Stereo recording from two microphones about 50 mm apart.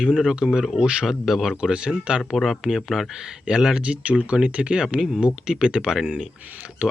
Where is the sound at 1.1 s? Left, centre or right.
Centre.